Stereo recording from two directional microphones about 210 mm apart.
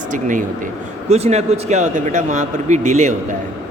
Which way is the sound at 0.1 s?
40° right (ahead or behind).